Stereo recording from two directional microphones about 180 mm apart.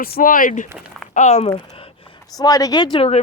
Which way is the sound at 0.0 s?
50° left (ahead or behind).